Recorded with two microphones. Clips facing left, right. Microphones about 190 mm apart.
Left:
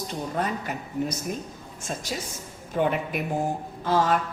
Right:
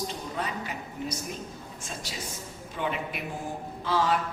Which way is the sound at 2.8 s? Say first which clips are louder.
Left 7 dB; 50° left (ahead or behind).